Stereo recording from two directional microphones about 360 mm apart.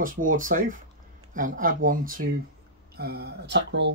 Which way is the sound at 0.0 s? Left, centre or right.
Right.